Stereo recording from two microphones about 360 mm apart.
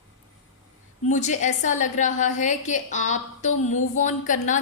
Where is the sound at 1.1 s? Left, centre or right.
Centre.